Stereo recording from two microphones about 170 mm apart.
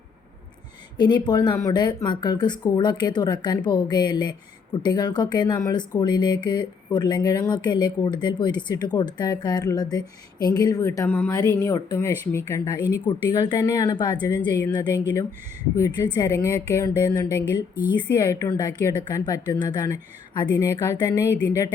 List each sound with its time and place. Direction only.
0.9 s speech: 25° left (ahead or behind)